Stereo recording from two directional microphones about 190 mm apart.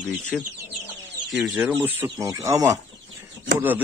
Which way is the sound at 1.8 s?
10° right (ahead or behind).